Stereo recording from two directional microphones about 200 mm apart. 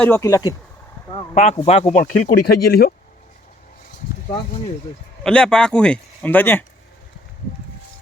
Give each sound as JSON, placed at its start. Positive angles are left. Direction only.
{"t": 0.0, "sound": "speech", "side_deg": 15}
{"t": 1.3, "sound": "speech", "side_deg": 30}
{"t": 2.3, "sound": "speech", "side_deg": 55}
{"t": 5.2, "sound": "a man's voice", "side_deg": 5}